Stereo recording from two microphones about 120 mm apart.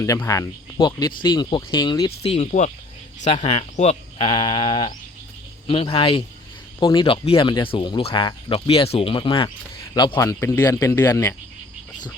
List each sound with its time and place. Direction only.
0.3 s speech: 30° left (ahead or behind)
2.0 s speech: 55° left (ahead or behind)
4.2 s speech: 45° left (ahead or behind)
9.9 s speech: 35° left (ahead or behind)